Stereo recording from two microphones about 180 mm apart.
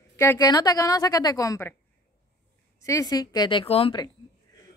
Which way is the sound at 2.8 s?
15° left (ahead or behind).